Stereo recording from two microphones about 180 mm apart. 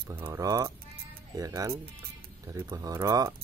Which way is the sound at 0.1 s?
15° right (ahead or behind).